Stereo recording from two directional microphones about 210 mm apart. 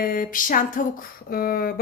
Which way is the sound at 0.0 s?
40° left (ahead or behind).